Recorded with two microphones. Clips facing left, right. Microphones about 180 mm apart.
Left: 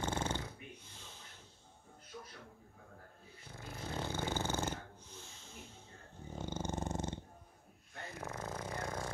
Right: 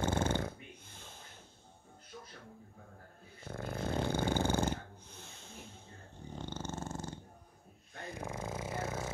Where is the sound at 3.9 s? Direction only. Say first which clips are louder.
Right 5 dB; 15° right (ahead or behind).